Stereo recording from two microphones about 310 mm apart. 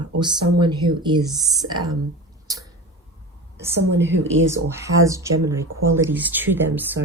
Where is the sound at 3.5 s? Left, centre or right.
Centre.